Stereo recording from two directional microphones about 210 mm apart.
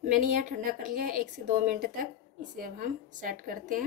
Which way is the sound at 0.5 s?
40° right (ahead or behind).